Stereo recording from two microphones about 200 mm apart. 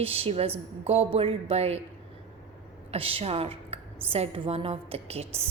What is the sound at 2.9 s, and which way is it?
A woman's voice, 30° right (ahead or behind).